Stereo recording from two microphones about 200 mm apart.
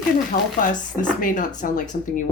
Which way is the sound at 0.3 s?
45° left (ahead or behind).